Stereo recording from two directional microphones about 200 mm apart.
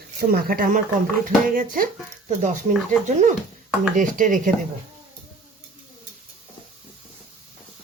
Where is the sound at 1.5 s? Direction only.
45° right (ahead or behind).